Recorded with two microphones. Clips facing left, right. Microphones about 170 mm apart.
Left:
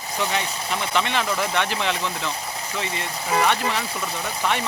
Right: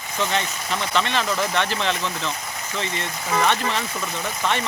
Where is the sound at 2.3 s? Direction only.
30° left (ahead or behind).